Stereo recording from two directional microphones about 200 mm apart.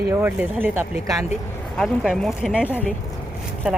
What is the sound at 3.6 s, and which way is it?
Speech, 5° right (ahead or behind).